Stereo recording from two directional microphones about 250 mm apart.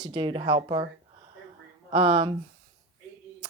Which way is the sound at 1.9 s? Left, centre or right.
Right.